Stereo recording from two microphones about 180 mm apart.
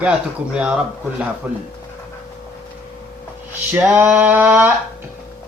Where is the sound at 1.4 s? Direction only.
10° right (ahead or behind).